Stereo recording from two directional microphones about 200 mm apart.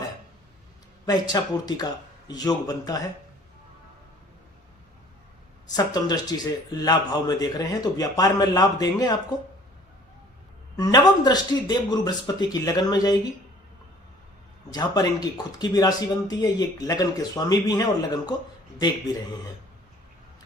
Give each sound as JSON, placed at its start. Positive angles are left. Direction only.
{"t": 1.0, "sound": "speech", "side_deg": 20}
{"t": 5.7, "sound": "speech", "side_deg": 20}
{"t": 10.8, "sound": "speech", "side_deg": 20}
{"t": 14.7, "sound": "speech", "side_deg": 20}